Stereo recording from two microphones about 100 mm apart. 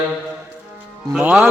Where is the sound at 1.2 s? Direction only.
10° right (ahead or behind).